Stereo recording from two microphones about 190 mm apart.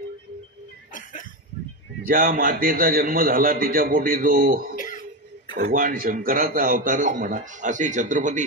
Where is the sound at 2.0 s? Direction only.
50° right (ahead or behind).